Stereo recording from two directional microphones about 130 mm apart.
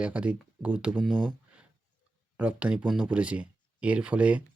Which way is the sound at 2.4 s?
10° right (ahead or behind).